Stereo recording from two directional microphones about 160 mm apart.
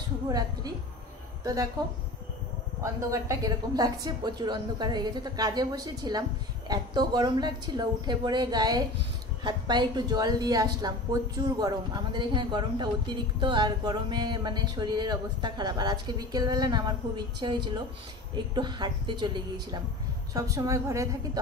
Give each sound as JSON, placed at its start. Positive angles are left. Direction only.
{"t": 0.3, "sound": "a woman's voice", "side_deg": -25}
{"t": 2.8, "sound": "speech", "side_deg": -20}